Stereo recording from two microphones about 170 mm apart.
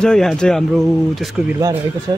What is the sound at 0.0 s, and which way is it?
Speech, 5° left (ahead or behind).